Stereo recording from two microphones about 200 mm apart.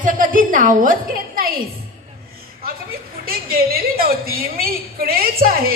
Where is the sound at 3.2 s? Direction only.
50° right (ahead or behind).